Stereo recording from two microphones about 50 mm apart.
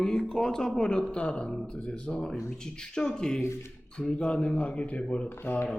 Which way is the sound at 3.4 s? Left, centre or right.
Left.